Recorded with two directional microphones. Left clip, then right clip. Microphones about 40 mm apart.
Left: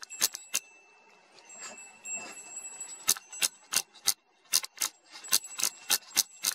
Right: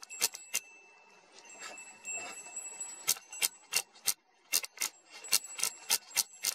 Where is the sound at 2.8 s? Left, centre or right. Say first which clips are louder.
Left 4 dB; left.